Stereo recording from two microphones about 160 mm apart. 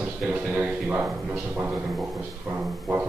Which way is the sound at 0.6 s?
10° right (ahead or behind).